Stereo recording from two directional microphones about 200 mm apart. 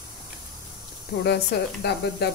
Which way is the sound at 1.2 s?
55° left (ahead or behind).